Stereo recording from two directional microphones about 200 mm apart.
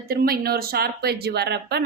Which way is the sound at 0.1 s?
50° right (ahead or behind).